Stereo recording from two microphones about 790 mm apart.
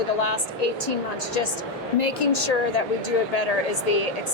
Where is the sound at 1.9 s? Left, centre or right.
Left.